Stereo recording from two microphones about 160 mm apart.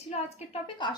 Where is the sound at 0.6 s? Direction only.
30° left (ahead or behind).